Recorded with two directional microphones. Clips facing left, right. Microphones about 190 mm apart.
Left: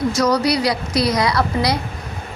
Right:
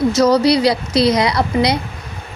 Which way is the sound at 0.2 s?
25° right (ahead or behind).